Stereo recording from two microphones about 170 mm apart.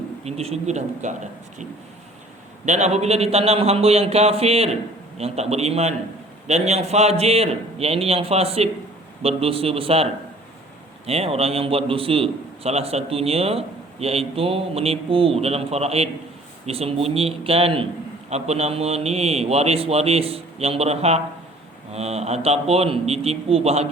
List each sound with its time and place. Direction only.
0.3 s a man's voice: 40° right (ahead or behind)
2.6 s a man's voice: 40° right (ahead or behind)